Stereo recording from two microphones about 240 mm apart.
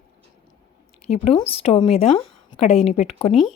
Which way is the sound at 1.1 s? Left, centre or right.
Left.